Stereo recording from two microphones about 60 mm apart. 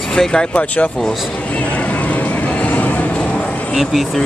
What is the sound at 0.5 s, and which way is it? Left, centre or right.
Speech, left.